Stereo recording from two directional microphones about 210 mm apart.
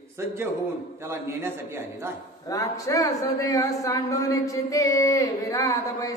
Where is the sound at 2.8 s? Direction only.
15° left (ahead or behind).